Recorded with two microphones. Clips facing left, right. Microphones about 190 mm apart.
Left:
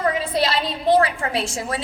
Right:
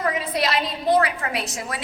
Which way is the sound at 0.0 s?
30° left (ahead or behind).